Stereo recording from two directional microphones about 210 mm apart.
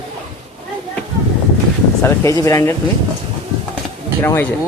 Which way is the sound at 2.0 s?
15° left (ahead or behind).